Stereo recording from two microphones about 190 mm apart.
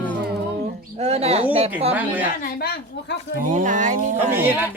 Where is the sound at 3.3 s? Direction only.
45° right (ahead or behind).